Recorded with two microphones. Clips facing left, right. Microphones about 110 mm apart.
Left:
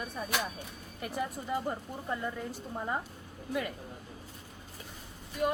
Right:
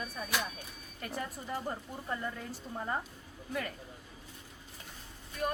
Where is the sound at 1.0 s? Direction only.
10° left (ahead or behind).